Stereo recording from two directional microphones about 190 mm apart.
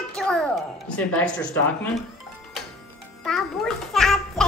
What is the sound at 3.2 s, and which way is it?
A child's voice, centre (ahead or behind).